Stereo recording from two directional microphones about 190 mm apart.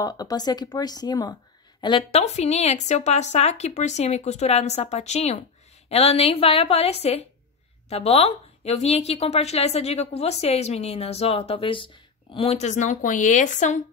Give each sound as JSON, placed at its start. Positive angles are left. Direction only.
{"t": 0.0, "sound": "a woman's voice", "side_deg": 20}